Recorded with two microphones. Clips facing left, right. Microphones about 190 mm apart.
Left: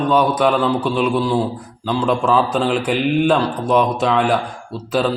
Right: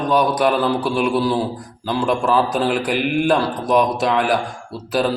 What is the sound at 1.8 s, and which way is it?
A man's voice, 10° right (ahead or behind).